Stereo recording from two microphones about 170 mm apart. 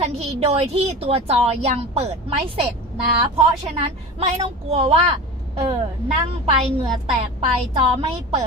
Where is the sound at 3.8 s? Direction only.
35° right (ahead or behind).